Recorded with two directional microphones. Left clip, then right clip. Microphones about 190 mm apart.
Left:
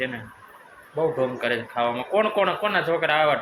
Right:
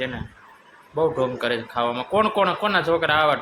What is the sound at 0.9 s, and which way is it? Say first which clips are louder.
Speech: right 2 dB; 30° right (ahead or behind).